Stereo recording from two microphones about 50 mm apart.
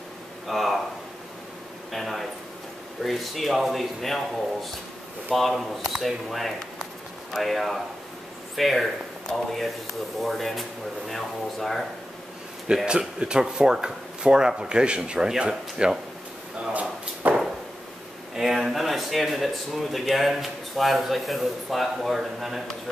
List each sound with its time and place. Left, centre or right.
0.5 s speech: centre
1.9 s speech: centre
12.6 s speech: centre
16.7 s drawer open or close: right
18.3 s speech: centre